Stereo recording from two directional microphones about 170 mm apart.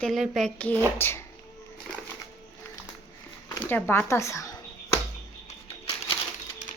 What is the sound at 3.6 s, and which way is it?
Speech, 10° left (ahead or behind).